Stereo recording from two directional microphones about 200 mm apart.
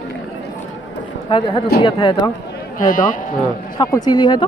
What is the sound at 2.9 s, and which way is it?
Speech, 40° left (ahead or behind).